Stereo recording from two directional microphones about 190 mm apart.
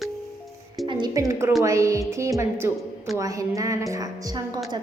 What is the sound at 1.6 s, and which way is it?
A woman's voice, 15° right (ahead or behind).